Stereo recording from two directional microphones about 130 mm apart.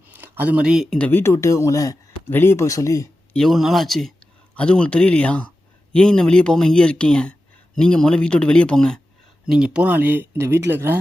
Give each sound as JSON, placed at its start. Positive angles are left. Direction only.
{"t": 0.1, "sound": "speech", "side_deg": -15}
{"t": 0.9, "sound": "speech", "side_deg": 10}
{"t": 1.2, "sound": "speech", "side_deg": 20}
{"t": 3.3, "sound": "a man's voice", "side_deg": 0}
{"t": 9.5, "sound": "speech", "side_deg": -5}